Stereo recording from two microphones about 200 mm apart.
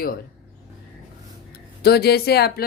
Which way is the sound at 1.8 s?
50° left (ahead or behind).